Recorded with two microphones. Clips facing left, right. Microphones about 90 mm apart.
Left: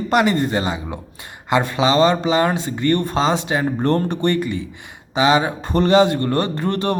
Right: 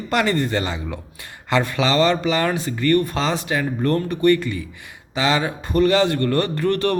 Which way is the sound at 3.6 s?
35° left (ahead or behind).